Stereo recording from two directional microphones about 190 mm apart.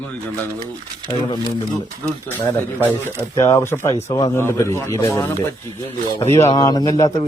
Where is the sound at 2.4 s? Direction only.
15° left (ahead or behind).